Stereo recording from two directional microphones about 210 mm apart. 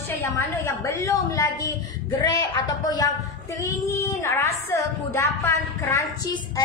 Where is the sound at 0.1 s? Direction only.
10° left (ahead or behind).